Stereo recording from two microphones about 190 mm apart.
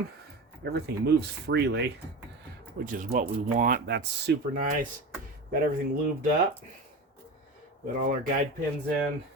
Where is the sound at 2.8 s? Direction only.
40° right (ahead or behind).